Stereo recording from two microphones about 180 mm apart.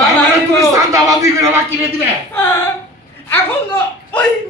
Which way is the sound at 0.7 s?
20° right (ahead or behind).